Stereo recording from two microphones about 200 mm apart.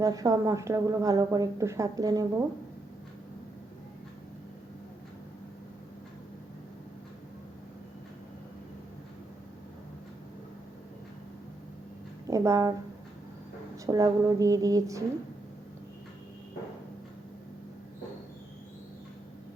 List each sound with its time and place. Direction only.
0.0 s a woman's voice: 20° right (ahead or behind)
12.3 s speech: 15° right (ahead or behind)
13.8 s a woman's voice: 15° right (ahead or behind)